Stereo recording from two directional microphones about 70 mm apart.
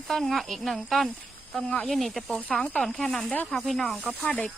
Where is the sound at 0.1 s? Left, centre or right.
Centre.